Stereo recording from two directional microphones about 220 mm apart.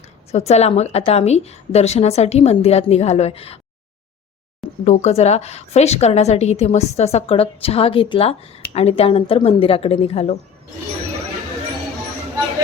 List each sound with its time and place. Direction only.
0.3 s a woman's voice: 30° left (ahead or behind)
4.9 s a woman's voice: 30° left (ahead or behind)